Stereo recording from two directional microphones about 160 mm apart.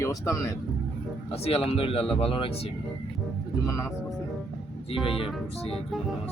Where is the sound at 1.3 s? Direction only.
35° left (ahead or behind).